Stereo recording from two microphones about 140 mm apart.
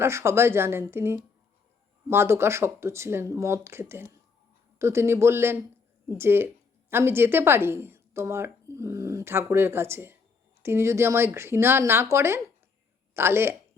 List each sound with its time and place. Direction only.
0.0 s speech: 20° right (ahead or behind)